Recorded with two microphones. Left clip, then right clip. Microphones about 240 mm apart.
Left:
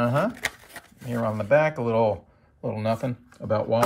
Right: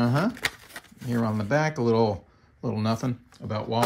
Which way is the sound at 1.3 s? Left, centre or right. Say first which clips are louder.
Left 7 dB; right.